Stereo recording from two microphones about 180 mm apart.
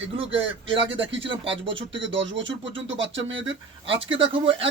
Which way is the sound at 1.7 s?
90° right.